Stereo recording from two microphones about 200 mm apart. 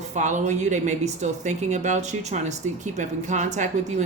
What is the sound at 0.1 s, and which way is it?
Speech, 35° right (ahead or behind).